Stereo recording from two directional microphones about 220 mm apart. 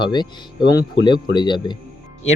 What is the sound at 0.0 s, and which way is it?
Speech, 20° left (ahead or behind).